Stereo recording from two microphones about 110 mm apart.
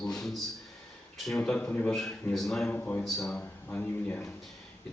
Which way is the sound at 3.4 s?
15° left (ahead or behind).